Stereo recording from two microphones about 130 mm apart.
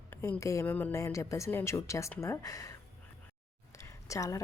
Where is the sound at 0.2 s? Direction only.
20° left (ahead or behind).